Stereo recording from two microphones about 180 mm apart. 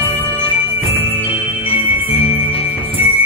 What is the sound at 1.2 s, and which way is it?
Music, 30° left (ahead or behind).